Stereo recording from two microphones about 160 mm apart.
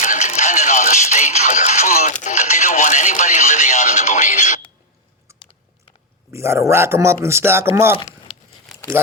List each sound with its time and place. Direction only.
0.0 s music: 50° left (ahead or behind)
2.2 s radio: 50° left (ahead or behind)
5.3 s biting: 15° right (ahead or behind)
6.3 s speech: 15° right (ahead or behind)